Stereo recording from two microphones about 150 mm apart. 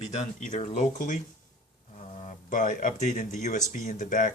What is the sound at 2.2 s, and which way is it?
Speech, 60° left (ahead or behind).